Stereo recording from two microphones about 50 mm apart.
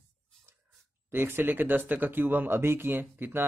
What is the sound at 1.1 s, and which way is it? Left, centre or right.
Speech, right.